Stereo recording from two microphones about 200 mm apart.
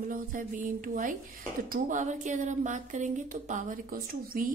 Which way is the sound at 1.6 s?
40° right (ahead or behind).